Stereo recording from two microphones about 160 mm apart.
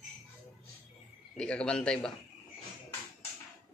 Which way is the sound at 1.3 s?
5° left (ahead or behind).